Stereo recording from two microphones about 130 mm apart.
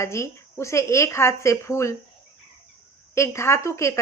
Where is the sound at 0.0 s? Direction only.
20° left (ahead or behind).